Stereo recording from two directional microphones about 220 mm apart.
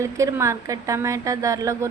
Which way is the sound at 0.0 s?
15° right (ahead or behind).